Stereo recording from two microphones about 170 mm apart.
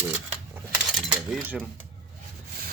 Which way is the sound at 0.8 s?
Centre (ahead or behind).